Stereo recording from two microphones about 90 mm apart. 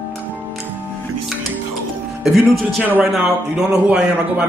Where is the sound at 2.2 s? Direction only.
Centre (ahead or behind).